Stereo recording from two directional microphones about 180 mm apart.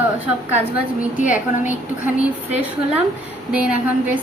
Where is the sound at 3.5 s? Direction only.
5° right (ahead or behind).